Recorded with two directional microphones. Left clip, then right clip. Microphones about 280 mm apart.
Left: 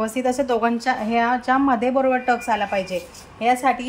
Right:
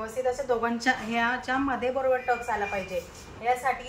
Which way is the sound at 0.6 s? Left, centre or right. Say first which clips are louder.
Left 6 dB; left.